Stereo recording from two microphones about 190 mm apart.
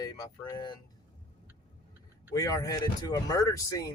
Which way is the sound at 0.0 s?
20° left (ahead or behind).